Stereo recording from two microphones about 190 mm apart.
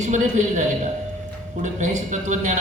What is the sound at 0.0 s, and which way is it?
Speech, 40° right (ahead or behind).